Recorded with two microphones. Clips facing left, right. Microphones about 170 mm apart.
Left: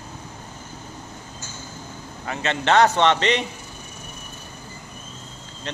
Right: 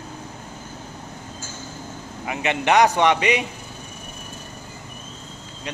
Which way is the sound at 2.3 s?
15° right (ahead or behind).